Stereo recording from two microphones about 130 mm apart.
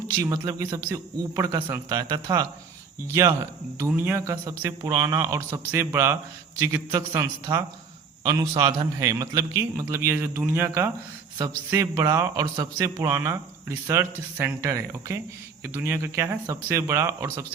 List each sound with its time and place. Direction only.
0.2 s a man's voice: 25° right (ahead or behind)
6.6 s a man's voice: 30° right (ahead or behind)